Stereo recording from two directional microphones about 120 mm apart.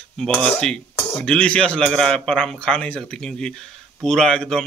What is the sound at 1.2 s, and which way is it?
A man's voice, 10° left (ahead or behind).